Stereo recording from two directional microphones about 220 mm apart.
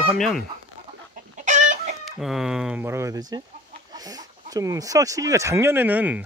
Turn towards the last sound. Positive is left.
turn(degrees=-10)  # may be behind; listen again after turning